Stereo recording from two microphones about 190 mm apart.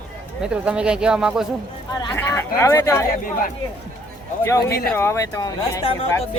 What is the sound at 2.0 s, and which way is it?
Speech, 15° left (ahead or behind).